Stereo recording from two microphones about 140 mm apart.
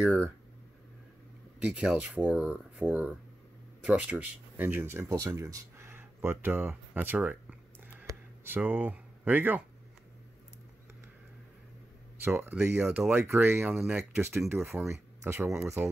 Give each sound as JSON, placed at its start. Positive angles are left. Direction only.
{"t": 0.0, "sound": "speech", "side_deg": -10}
{"t": 1.6, "sound": "speech", "side_deg": -5}
{"t": 8.0, "sound": "a sound", "side_deg": -15}
{"t": 12.4, "sound": "speech", "side_deg": -15}